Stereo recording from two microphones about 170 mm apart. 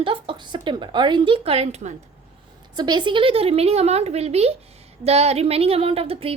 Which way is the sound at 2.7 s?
25° right (ahead or behind).